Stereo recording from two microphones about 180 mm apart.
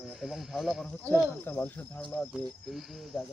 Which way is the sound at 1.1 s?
10° left (ahead or behind).